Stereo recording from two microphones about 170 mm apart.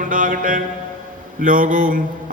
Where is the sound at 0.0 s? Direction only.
50° right (ahead or behind).